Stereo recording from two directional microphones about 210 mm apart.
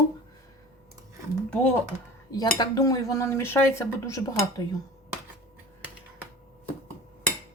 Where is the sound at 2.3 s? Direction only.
20° left (ahead or behind).